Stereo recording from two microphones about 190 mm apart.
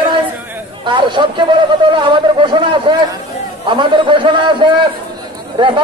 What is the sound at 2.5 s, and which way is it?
A man's voice, 25° right (ahead or behind).